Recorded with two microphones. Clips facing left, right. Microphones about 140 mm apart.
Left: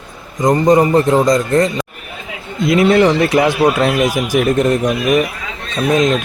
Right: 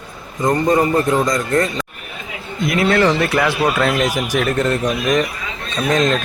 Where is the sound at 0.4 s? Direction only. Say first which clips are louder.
Left 4 dB; 15° left (ahead or behind).